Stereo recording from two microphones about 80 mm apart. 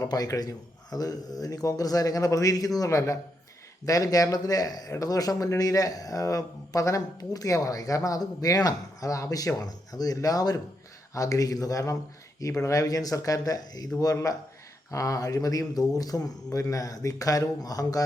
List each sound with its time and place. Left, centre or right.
0.0 s speech: left